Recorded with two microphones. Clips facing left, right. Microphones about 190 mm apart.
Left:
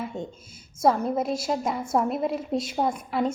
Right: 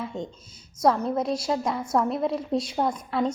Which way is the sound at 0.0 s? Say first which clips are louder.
Even; 5° left (ahead or behind).